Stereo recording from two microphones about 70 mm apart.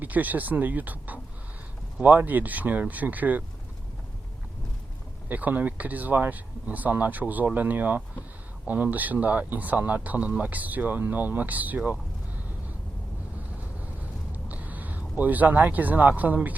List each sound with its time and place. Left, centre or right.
0.0 s speech: right
5.3 s speech: right
14.3 s speech: right